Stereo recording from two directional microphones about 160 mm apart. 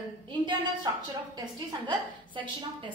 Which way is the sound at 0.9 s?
25° right (ahead or behind).